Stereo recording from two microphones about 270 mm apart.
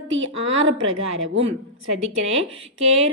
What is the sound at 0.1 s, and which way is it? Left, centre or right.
Speech, right.